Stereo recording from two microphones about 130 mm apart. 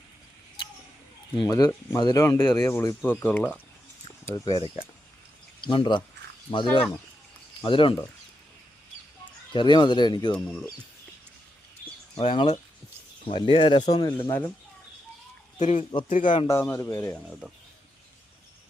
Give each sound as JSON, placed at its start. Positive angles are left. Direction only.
{"t": 1.4, "sound": "speech", "side_deg": 30}
{"t": 4.4, "sound": "speech", "side_deg": 40}
{"t": 9.5, "sound": "speech", "side_deg": 35}
{"t": 10.3, "sound": "speech", "side_deg": 5}
{"t": 12.2, "sound": "speech", "side_deg": 50}
{"t": 15.5, "sound": "speech", "side_deg": 65}
{"t": 15.8, "sound": "speech", "side_deg": 40}
{"t": 16.0, "sound": "speech", "side_deg": 90}
{"t": 16.5, "sound": "speech", "side_deg": 20}